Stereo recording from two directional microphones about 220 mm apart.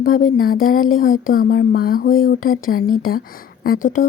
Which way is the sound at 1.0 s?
40° left (ahead or behind).